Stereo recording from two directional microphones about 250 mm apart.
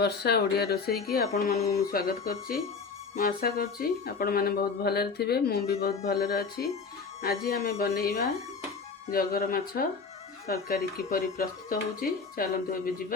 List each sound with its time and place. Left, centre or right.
0.0 s speech: left